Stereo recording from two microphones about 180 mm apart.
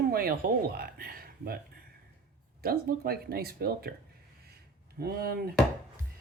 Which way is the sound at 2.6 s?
55° right (ahead or behind).